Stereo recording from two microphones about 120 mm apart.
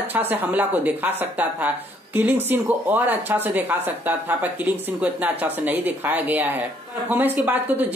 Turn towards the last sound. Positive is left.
turn(degrees=-15)  # may be behind; listen again after turning